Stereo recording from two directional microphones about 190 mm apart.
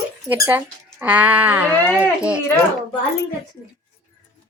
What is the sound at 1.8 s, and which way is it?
Speech, 10° left (ahead or behind).